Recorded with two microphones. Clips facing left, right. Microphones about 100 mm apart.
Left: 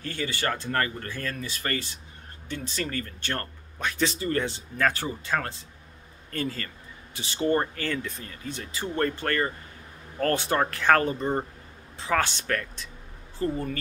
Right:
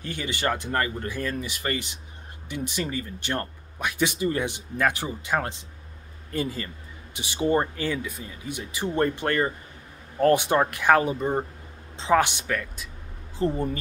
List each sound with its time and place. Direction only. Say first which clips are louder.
0.0 s speech: right 1 dB; 20° right (ahead or behind)
13.4 s speech: right 3 dB; 25° right (ahead or behind)